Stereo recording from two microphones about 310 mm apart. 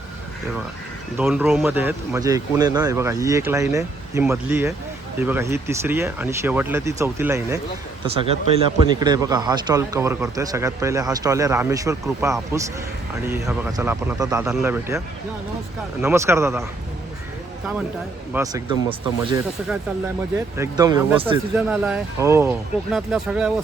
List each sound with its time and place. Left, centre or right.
1.1 s speech: centre
8.8 s speech: centre
18.3 s speech: centre
20.6 s speech: centre
21.5 s speech: centre